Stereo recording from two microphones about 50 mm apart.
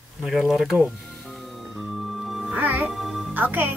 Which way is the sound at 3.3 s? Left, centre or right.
Right.